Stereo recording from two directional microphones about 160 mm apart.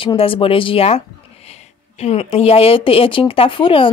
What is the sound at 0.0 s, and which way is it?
Speech, 35° left (ahead or behind).